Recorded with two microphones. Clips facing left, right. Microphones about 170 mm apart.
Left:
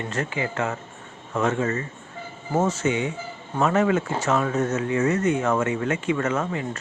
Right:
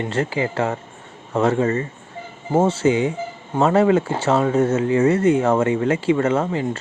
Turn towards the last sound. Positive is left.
turn(degrees=-30)  # may be behind; listen again after turning